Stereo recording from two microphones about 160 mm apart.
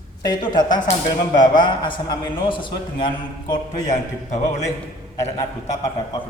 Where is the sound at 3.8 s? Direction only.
45° left (ahead or behind).